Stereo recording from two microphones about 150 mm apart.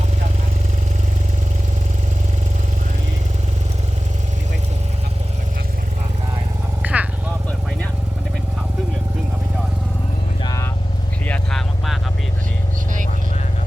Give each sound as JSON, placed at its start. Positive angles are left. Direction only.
{"t": 6.8, "sound": "vehicle", "side_deg": -10}
{"t": 10.4, "sound": "vehicle", "side_deg": 20}
{"t": 11.3, "sound": "vehicle", "side_deg": 5}